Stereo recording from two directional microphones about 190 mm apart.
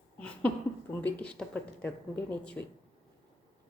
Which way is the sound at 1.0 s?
5° left (ahead or behind).